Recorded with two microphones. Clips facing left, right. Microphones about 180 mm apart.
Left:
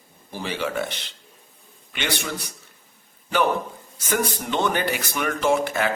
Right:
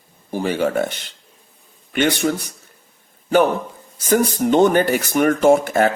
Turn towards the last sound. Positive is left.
turn(degrees=-45)  # may be behind; listen again after turning